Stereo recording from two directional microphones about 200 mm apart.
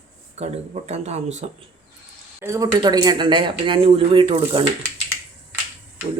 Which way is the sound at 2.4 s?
15° right (ahead or behind).